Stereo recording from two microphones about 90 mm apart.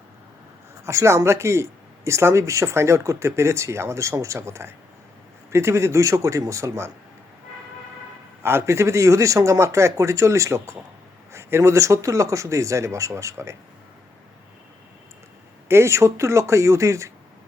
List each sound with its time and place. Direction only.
0.9 s speech: 30° right (ahead or behind)
8.4 s speech: 30° right (ahead or behind)
15.7 s speech: 30° right (ahead or behind)